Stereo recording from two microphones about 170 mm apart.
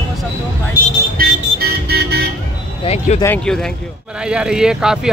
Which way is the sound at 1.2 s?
65° right (ahead or behind).